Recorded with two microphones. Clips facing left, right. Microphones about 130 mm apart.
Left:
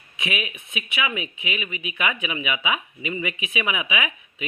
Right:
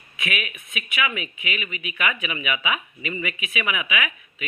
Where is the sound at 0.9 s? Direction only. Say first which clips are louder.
Even; 20° left (ahead or behind).